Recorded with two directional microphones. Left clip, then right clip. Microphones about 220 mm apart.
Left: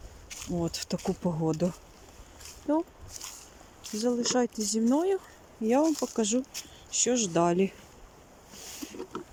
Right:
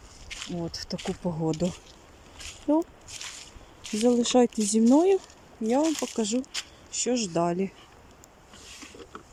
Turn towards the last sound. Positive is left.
turn(degrees=0)  # may be behind; listen again after turning